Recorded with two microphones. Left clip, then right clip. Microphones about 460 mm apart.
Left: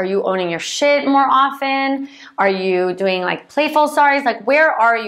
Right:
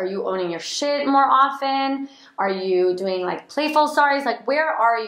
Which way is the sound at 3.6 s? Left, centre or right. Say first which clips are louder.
Left 4 dB; centre.